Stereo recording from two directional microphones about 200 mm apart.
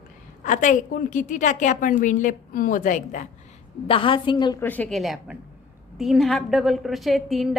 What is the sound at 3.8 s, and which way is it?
Speech, 25° left (ahead or behind).